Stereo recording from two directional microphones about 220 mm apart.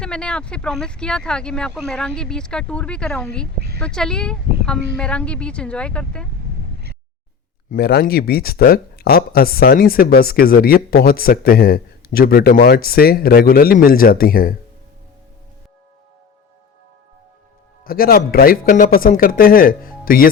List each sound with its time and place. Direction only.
0.0 s speech: 5° left (ahead or behind)
7.7 s speech: 45° left (ahead or behind)
17.8 s speech: 40° left (ahead or behind)